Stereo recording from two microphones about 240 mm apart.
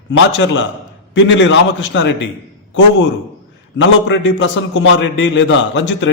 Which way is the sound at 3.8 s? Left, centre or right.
Left.